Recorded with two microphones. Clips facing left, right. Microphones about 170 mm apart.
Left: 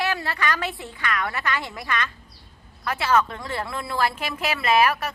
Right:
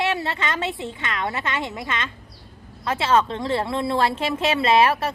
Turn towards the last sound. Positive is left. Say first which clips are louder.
# right 3 dB
turn(degrees=-30)  # may be behind; listen again after turning